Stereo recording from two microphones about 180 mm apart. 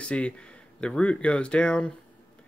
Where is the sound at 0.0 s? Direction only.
5° left (ahead or behind).